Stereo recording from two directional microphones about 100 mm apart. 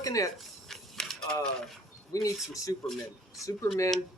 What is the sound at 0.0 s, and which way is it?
Speech, 35° left (ahead or behind).